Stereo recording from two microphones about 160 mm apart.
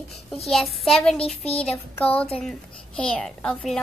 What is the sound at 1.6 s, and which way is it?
Child singing, 10° left (ahead or behind).